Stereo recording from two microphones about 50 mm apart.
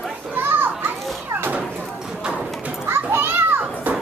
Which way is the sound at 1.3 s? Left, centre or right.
Right.